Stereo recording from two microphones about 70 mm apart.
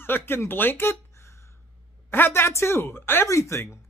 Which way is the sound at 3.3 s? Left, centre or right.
Left.